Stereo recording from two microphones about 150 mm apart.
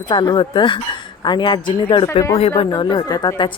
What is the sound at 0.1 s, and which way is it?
A woman's voice, 30° left (ahead or behind).